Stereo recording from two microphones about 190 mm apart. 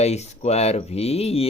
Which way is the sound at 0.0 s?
35° left (ahead or behind).